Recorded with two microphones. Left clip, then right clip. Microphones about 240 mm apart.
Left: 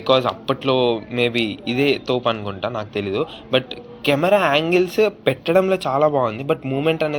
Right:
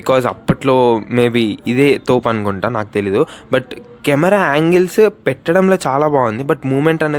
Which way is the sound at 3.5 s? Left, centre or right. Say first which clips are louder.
Right 3 dB; right.